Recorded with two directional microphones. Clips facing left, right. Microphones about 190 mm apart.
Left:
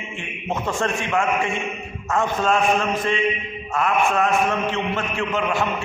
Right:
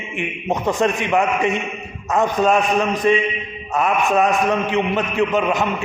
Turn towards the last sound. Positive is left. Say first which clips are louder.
# right 5 dB
turn(degrees=-20)  # may be behind; listen again after turning